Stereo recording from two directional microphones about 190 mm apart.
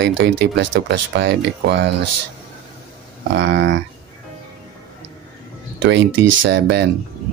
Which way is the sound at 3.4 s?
70° right (ahead or behind).